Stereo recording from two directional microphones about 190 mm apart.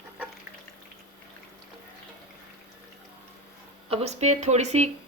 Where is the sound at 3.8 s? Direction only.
35° right (ahead or behind).